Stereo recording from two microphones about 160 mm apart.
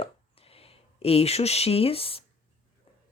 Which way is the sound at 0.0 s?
35° left (ahead or behind).